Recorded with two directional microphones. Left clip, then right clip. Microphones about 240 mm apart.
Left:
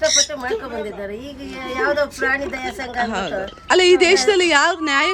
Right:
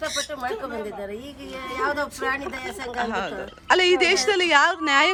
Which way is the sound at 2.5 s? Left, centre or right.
Centre.